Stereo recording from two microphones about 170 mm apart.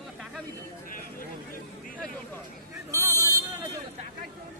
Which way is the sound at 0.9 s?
55° left (ahead or behind).